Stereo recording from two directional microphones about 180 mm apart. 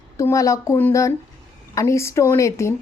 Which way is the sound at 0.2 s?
15° left (ahead or behind).